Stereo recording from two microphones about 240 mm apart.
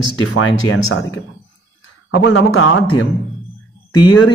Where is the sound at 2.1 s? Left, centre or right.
Left.